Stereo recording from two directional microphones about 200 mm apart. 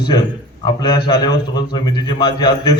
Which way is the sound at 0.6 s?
20° left (ahead or behind).